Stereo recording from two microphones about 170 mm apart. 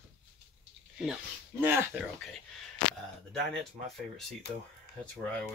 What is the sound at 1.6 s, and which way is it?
Speech, 10° right (ahead or behind).